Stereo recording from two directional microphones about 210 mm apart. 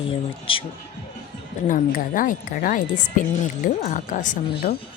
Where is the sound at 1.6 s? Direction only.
40° left (ahead or behind).